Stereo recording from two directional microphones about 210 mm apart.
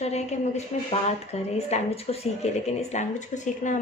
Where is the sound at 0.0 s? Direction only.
30° left (ahead or behind).